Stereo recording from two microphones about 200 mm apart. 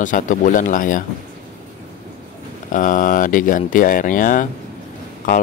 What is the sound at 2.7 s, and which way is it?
Speech, 40° left (ahead or behind).